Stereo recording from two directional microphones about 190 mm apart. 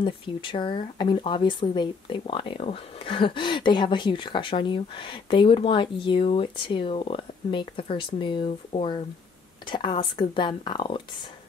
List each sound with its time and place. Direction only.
0.0 s speech: 25° left (ahead or behind)